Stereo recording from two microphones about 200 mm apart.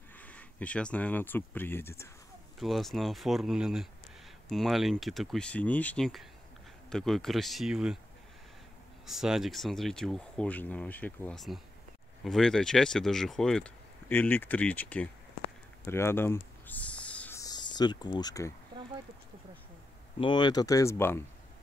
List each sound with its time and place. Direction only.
0.2 s speech: 5° left (ahead or behind)
2.6 s speech: centre (ahead or behind)
9.0 s speech: centre (ahead or behind)
15.8 s a sound: 10° left (ahead or behind)
20.2 s speech: 20° left (ahead or behind)